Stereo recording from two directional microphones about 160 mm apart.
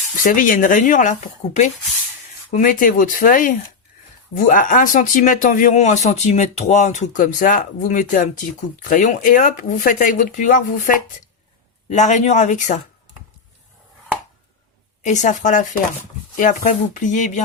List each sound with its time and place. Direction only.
0.2 s speech: 55° left (ahead or behind)
2.5 s speech: 55° left (ahead or behind)
15.0 s speech: 50° left (ahead or behind)